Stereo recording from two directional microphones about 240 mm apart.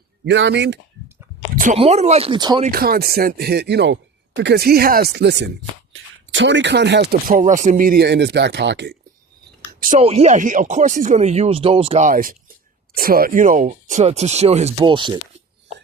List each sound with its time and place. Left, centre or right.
0.3 s speech: right
1.6 s speech: right
2.6 s speech: right
9.8 s speech: right